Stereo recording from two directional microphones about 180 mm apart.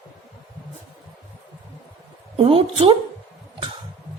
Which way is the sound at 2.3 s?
35° right (ahead or behind).